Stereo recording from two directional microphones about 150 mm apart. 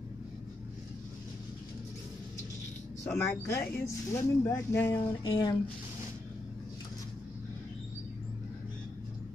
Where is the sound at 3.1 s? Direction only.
15° left (ahead or behind).